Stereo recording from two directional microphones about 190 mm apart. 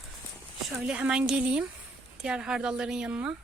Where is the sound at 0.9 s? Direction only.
5° right (ahead or behind).